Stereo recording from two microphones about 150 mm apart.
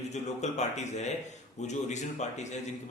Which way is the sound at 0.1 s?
50° left (ahead or behind).